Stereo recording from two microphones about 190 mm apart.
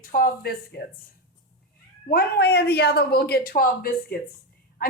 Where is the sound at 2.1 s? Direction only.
60° left (ahead or behind).